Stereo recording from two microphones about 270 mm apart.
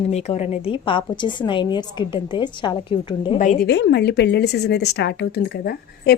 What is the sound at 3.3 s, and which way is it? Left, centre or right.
A woman's voice, left.